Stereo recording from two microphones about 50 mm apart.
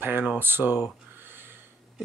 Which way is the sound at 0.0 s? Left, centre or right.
Right.